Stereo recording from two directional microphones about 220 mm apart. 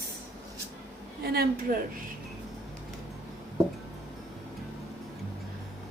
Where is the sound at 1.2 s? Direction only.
45° right (ahead or behind).